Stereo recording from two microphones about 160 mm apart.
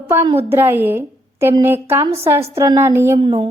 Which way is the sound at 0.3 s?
15° right (ahead or behind).